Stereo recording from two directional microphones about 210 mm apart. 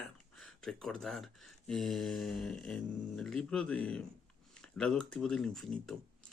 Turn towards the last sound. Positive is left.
turn(degrees=0)  # may be behind; listen again after turning